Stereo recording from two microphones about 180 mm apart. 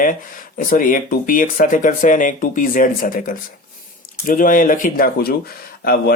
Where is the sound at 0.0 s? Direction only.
50° left (ahead or behind).